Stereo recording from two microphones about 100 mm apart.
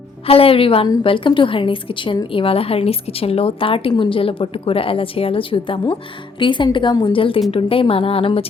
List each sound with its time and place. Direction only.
0.3 s a woman's voice: 70° left (ahead or behind)